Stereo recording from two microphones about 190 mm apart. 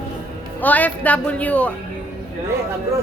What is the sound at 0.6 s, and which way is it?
Speech, 10° left (ahead or behind).